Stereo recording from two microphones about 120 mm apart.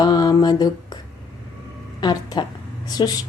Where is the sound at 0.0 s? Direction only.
30° left (ahead or behind).